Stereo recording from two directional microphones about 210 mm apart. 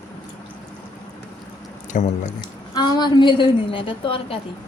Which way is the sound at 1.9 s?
35° left (ahead or behind).